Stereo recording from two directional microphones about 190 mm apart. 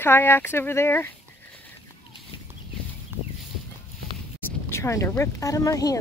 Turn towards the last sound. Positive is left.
turn(degrees=20)  # may be behind; listen again after turning